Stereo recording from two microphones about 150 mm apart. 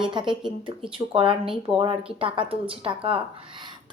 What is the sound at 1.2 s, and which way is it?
A woman's voice, 35° right (ahead or behind).